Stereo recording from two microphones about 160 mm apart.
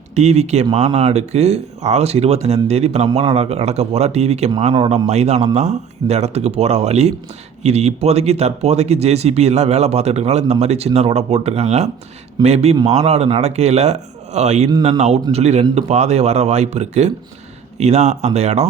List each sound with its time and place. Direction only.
0.1 s speech: 45° right (ahead or behind)